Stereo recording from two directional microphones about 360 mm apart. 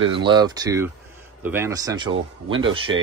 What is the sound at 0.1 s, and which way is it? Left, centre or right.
Speech, centre.